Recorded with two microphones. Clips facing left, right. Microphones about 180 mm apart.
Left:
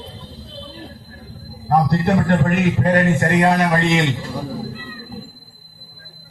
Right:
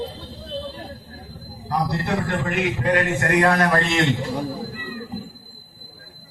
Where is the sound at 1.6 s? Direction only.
55° left (ahead or behind).